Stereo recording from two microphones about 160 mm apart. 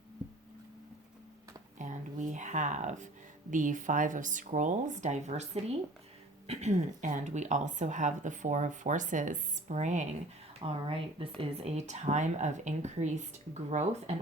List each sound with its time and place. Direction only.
1.8 s a woman's voice: 50° right (ahead or behind)
10.6 s a woman's voice: 35° right (ahead or behind)